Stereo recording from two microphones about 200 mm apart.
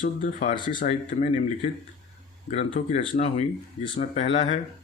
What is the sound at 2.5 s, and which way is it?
Speech, 30° left (ahead or behind).